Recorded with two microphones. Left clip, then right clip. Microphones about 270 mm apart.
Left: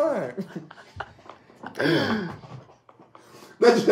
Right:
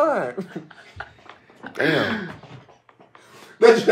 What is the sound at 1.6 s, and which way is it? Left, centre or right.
Speech, centre.